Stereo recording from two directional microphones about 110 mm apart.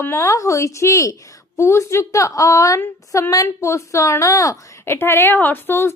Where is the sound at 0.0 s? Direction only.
25° left (ahead or behind).